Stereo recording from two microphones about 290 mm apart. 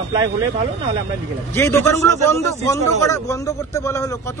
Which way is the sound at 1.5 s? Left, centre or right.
Centre.